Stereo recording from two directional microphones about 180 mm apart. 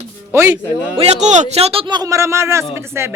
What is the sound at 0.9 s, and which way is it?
Speech, 35° right (ahead or behind).